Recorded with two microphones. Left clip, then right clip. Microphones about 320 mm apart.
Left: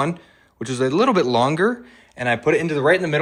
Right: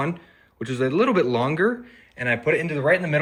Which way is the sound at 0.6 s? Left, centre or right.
Centre.